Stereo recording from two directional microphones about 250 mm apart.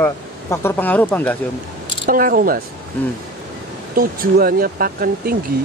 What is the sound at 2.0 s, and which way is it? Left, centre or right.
Speech, right.